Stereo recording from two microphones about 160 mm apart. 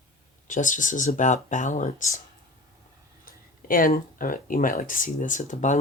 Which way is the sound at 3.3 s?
60° left (ahead or behind).